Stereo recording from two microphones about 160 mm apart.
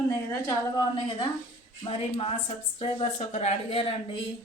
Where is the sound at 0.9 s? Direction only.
35° left (ahead or behind).